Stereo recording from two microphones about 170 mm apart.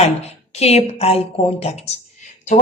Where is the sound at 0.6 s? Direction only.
35° left (ahead or behind).